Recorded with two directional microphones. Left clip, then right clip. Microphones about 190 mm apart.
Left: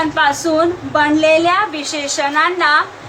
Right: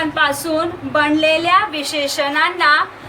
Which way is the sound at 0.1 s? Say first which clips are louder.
Left 3 dB; 60° right (ahead or behind).